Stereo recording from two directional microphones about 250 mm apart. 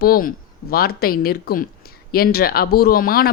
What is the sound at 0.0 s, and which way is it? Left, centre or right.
Speech, left.